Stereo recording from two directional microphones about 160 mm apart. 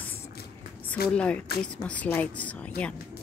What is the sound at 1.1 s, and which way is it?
A woman's voice, 5° left (ahead or behind).